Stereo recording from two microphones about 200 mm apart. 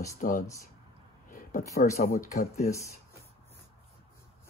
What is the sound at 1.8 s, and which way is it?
Speech, 45° left (ahead or behind).